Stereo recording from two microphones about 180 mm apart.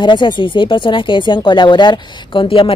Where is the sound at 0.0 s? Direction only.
25° left (ahead or behind).